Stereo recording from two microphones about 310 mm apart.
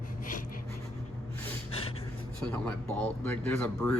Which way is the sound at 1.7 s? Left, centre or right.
Centre.